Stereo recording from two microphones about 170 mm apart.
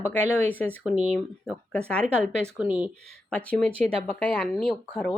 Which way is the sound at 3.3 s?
10° left (ahead or behind).